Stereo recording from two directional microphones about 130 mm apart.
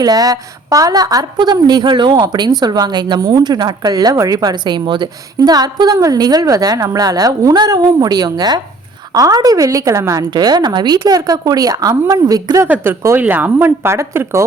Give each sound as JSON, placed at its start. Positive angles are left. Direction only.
{"t": 0.0, "sound": "a woman's voice", "side_deg": -30}
{"t": 12.6, "sound": "speech", "side_deg": -15}